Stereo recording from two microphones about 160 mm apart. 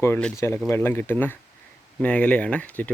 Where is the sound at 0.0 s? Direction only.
15° left (ahead or behind).